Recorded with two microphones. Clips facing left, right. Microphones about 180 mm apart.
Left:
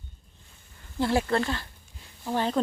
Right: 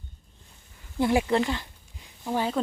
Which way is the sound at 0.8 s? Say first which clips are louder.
Right 2 dB; 15° right (ahead or behind).